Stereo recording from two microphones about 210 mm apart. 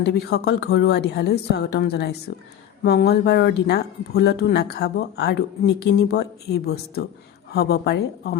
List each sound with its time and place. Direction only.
0.0 s speech: 50° left (ahead or behind)